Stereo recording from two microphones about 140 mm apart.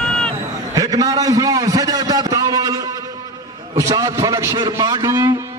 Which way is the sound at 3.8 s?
25° right (ahead or behind).